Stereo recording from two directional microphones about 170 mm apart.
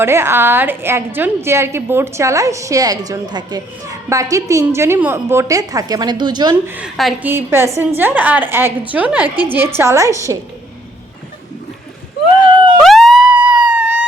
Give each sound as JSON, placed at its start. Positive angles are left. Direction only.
{"t": 0.0, "sound": "a woman's voice", "side_deg": -15}
{"t": 6.7, "sound": "a woman's voice", "side_deg": -5}
{"t": 7.3, "sound": "a woman's voice", "side_deg": -15}
{"t": 12.8, "sound": "police car", "side_deg": 0}